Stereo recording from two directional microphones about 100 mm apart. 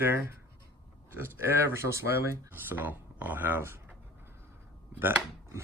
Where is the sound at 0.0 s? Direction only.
25° right (ahead or behind).